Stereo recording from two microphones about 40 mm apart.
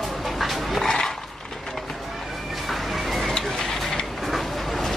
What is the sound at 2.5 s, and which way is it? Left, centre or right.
Music, centre.